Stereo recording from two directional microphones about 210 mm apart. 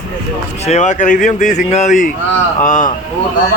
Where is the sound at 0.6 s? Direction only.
35° left (ahead or behind).